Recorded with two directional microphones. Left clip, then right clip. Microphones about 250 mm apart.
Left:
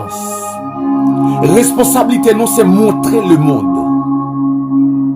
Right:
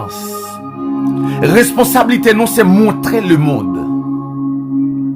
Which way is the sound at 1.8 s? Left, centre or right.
Right.